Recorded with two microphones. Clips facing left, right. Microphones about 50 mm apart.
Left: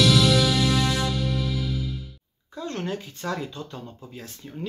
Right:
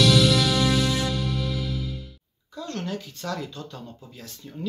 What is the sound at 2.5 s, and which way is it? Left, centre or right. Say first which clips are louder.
Speech: left 1 dB; left.